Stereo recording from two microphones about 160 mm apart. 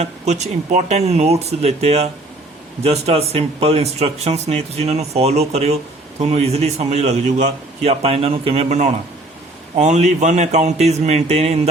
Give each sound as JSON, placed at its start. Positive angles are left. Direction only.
{"t": 0.0, "sound": "speech", "side_deg": -45}